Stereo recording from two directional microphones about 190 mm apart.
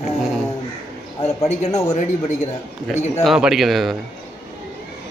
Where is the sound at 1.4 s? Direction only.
35° left (ahead or behind).